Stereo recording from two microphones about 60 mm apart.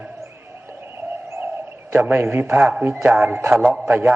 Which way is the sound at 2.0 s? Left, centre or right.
Right.